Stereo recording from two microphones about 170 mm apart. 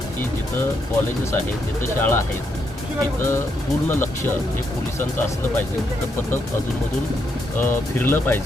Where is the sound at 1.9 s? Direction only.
15° left (ahead or behind).